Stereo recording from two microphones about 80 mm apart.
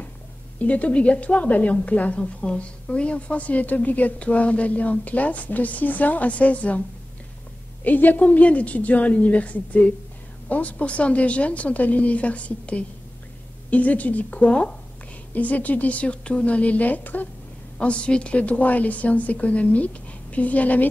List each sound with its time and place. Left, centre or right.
0.6 s a woman's voice: centre
7.8 s a woman's voice: left